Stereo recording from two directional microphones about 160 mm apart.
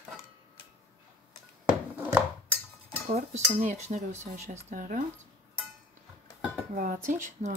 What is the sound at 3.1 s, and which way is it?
Speech, 45° right (ahead or behind).